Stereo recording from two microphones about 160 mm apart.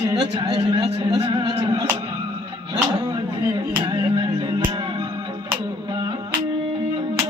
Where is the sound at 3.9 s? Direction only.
35° right (ahead or behind).